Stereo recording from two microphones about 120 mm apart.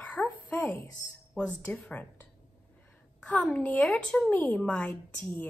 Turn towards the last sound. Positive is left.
turn(degrees=10)  # may be behind; listen again after turning